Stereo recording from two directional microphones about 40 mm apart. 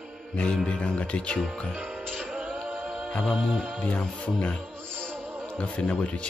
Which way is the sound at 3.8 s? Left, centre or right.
Left.